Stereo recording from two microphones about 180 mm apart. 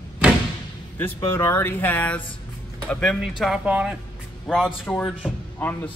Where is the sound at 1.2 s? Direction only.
15° left (ahead or behind).